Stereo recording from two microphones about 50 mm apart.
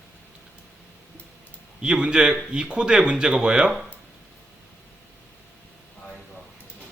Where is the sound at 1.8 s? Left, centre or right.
Centre.